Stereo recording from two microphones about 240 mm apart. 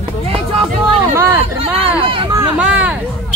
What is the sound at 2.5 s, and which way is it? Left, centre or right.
Speech, centre.